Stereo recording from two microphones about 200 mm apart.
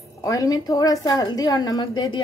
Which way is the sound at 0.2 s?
15° left (ahead or behind).